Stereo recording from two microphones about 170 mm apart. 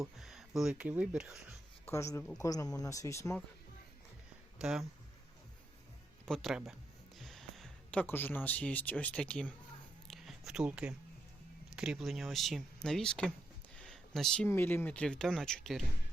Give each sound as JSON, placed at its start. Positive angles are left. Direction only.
{"t": 0.0, "sound": "speech", "side_deg": 0}
{"t": 1.9, "sound": "speech", "side_deg": 15}
{"t": 4.5, "sound": "speech", "side_deg": -5}
{"t": 6.2, "sound": "speech", "side_deg": 0}
{"t": 10.1, "sound": "a sound", "side_deg": 0}
{"t": 11.7, "sound": "speech", "side_deg": -5}